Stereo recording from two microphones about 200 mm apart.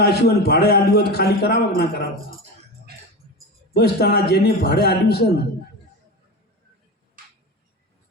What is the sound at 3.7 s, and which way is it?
A man's voice, 55° left (ahead or behind).